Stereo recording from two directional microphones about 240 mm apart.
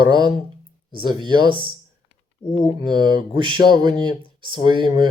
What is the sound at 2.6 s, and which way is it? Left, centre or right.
Speech, centre.